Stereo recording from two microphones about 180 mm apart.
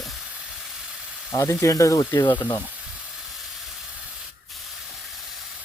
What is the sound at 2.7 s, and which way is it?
Sizzle, 5° right (ahead or behind).